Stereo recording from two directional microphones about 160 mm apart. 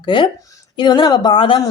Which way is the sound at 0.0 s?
30° left (ahead or behind).